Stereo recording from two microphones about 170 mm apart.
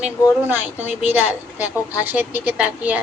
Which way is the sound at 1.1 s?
10° right (ahead or behind).